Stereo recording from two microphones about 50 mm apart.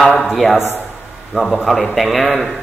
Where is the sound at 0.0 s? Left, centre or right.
Centre.